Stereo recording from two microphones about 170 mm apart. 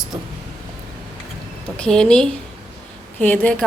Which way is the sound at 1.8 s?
5° left (ahead or behind).